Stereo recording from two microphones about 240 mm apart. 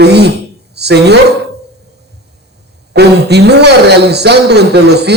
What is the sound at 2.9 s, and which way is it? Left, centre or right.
A man's voice, right.